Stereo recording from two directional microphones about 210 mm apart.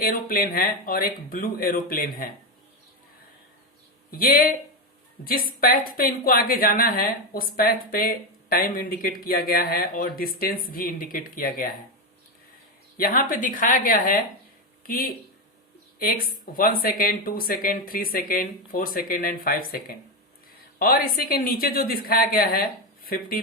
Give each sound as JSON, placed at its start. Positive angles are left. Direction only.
{"t": 0.0, "sound": "a woman's voice", "side_deg": 45}
{"t": 4.1, "sound": "a woman's voice", "side_deg": 45}
{"t": 13.0, "sound": "a woman's voice", "side_deg": 45}
{"t": 16.0, "sound": "a woman's voice", "side_deg": 45}
{"t": 20.7, "sound": "a woman's voice", "side_deg": 45}